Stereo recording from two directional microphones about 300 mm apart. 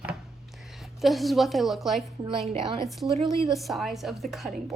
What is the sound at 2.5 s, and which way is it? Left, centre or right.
Speech, centre.